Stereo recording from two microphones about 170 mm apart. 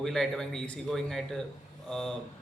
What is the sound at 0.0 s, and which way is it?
Speech, centre (ahead or behind).